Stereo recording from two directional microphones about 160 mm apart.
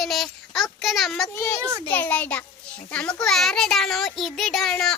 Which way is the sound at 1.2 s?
20° left (ahead or behind).